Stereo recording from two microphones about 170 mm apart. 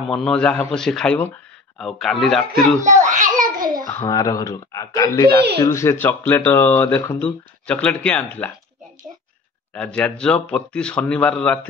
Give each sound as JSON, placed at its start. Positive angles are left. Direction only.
{"t": 0.0, "sound": "speech", "side_deg": 0}
{"t": 3.1, "sound": "a sound", "side_deg": -50}
{"t": 3.9, "sound": "speech", "side_deg": 20}
{"t": 9.8, "sound": "speech", "side_deg": 5}